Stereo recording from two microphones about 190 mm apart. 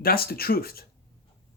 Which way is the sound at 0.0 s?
50° left (ahead or behind).